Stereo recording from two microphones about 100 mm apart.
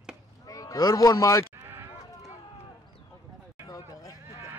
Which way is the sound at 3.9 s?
35° left (ahead or behind).